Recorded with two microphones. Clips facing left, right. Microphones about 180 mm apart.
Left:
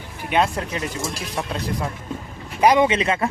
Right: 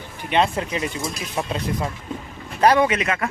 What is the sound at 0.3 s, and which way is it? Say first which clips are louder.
Speech: even; centre (ahead or behind).